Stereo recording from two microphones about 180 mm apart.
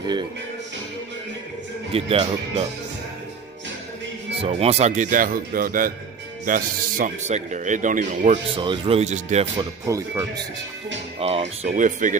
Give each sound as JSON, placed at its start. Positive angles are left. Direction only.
{"t": 0.0, "sound": "music", "side_deg": -25}
{"t": 1.9, "sound": "speech", "side_deg": -30}
{"t": 4.4, "sound": "speech", "side_deg": -35}
{"t": 8.5, "sound": "speech", "side_deg": -30}
{"t": 9.6, "sound": "speech", "side_deg": -20}
{"t": 11.1, "sound": "speech", "side_deg": -35}